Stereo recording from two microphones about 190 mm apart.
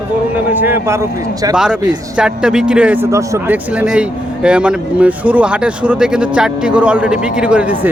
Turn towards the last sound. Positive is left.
turn(degrees=-10)  # may be behind; listen again after turning